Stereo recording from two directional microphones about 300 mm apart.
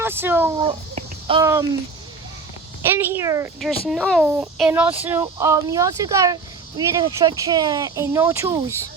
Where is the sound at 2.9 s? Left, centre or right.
Centre.